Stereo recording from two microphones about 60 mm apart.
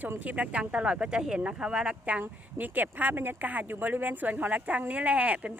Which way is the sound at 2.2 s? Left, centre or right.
Right.